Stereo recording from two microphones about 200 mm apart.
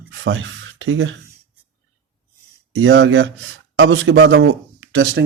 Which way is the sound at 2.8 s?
70° right (ahead or behind).